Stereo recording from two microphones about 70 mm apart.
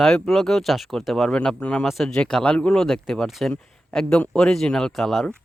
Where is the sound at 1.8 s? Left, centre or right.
Centre.